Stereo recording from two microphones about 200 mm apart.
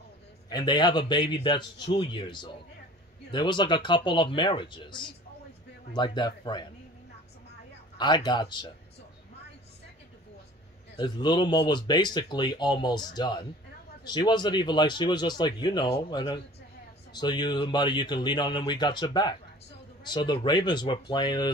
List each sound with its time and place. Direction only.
0.5 s speech: 20° left (ahead or behind)
8.0 s speech: 20° left (ahead or behind)
11.0 s speech: 20° left (ahead or behind)